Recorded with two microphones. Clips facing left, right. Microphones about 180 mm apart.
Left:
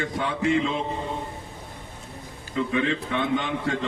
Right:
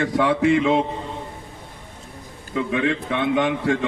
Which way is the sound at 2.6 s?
70° right (ahead or behind).